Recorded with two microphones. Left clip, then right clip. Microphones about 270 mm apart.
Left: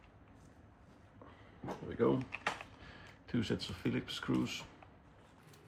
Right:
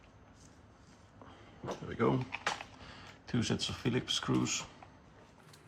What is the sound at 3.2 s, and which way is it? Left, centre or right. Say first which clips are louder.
Speech: right 3 dB; right.